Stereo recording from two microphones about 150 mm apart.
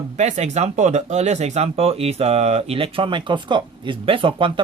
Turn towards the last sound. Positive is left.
turn(degrees=-35)  # may be behind; listen again after turning